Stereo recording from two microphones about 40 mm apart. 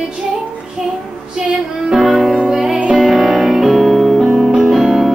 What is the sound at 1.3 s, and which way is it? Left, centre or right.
Music, centre.